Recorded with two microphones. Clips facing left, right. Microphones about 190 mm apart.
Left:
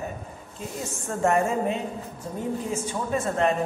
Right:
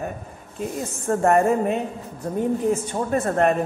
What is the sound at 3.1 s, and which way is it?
Speech, 60° right (ahead or behind).